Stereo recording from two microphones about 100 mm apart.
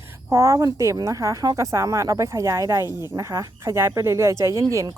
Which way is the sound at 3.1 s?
30° right (ahead or behind).